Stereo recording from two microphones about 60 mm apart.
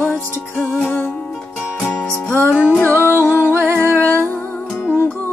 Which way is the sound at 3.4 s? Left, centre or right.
Right.